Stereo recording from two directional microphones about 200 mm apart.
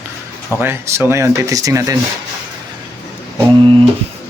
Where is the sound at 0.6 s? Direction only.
10° right (ahead or behind).